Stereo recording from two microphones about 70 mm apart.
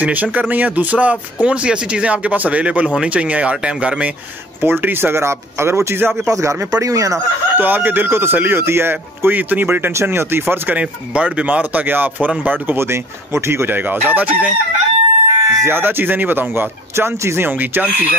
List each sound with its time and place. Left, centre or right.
0.0 s speech: right
4.6 s speech: right
7.5 s speech: right
10.8 s speech: centre
15.2 s a sound: right
15.7 s speech: right
17.5 s speech: right